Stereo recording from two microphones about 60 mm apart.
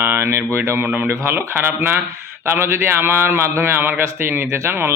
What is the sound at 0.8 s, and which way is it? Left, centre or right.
Speech, right.